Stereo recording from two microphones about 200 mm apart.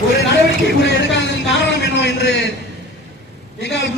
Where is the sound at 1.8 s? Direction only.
60° left (ahead or behind).